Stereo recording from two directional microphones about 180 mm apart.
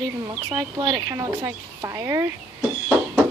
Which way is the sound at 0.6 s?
20° right (ahead or behind).